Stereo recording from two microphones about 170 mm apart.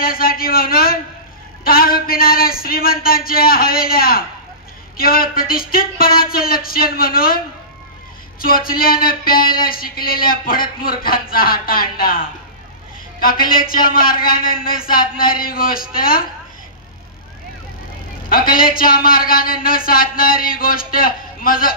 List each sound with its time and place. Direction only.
0.0 s speech: 60° left (ahead or behind)
18.3 s speech: 55° left (ahead or behind)